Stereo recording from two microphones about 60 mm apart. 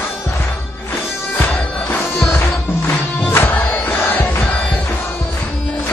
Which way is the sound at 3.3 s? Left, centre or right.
Left.